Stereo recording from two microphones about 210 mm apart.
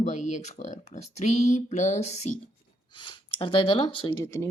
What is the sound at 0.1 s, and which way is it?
Speech, 35° left (ahead or behind).